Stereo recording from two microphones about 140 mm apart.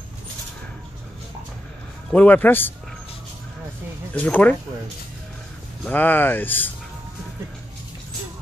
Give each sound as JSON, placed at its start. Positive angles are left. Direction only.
{"t": 2.1, "sound": "speech", "side_deg": 10}
{"t": 4.1, "sound": "speech", "side_deg": 10}
{"t": 5.9, "sound": "speech", "side_deg": 10}